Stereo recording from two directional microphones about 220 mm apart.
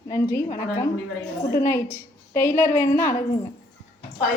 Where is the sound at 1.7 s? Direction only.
10° left (ahead or behind).